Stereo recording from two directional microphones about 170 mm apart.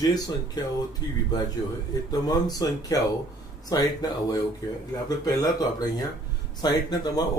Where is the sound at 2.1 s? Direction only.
20° left (ahead or behind).